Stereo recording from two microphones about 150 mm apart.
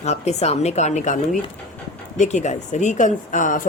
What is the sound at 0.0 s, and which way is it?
Speech, 45° left (ahead or behind).